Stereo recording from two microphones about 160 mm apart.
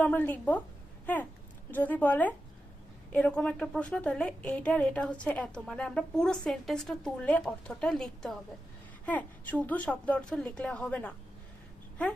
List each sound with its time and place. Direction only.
0.0 s a woman's voice: 10° left (ahead or behind)
1.0 s a sound: 10° left (ahead or behind)
1.7 s a woman's voice: 10° left (ahead or behind)